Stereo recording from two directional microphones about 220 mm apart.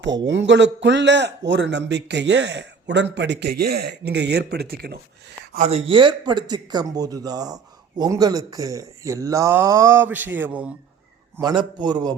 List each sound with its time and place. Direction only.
0.3 s a man's voice: 55° right (ahead or behind)
5.5 s speech: 30° right (ahead or behind); by 10.7 s 5° right (ahead or behind)
11.3 s a man's voice: 20° right (ahead or behind)